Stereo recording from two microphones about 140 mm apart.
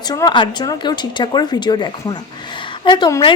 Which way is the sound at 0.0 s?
30° left (ahead or behind).